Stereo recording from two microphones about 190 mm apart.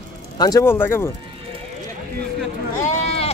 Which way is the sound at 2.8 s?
40° left (ahead or behind).